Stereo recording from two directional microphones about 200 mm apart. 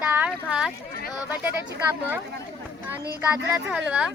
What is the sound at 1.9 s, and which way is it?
Speech, 10° right (ahead or behind).